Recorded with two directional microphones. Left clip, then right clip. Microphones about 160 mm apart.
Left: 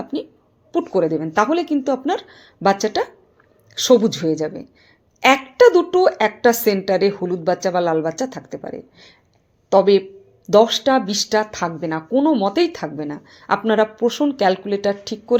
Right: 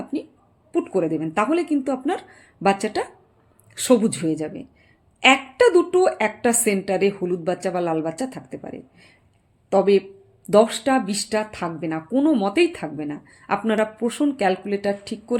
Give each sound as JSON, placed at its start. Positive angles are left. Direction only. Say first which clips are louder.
{"t": 0.9, "sound": "a woman's voice", "louder": "left 6 dB", "side_deg": -15}